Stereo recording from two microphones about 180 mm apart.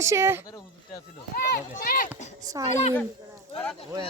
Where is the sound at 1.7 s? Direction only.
50° left (ahead or behind).